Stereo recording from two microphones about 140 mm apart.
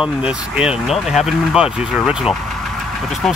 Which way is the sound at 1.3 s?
5° right (ahead or behind).